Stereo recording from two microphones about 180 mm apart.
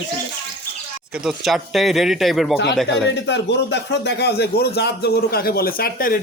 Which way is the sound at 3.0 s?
75° left (ahead or behind).